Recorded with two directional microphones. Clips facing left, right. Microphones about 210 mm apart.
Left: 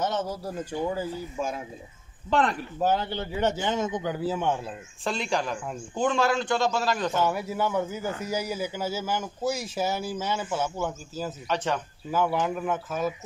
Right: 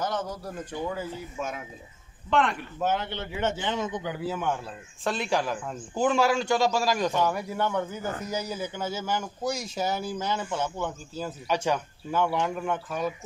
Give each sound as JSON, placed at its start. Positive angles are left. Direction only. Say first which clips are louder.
{"t": 0.0, "sound": "a man's voice", "louder": "left 2 dB", "side_deg": 25}
{"t": 5.0, "sound": "a man's voice", "louder": "right 1 dB", "side_deg": -5}
{"t": 7.1, "sound": "speech", "louder": "even", "side_deg": 5}
{"t": 11.4, "sound": "a man's voice", "louder": "right 2 dB", "side_deg": -10}
{"t": 12.1, "sound": "speech", "louder": "left 1 dB", "side_deg": 5}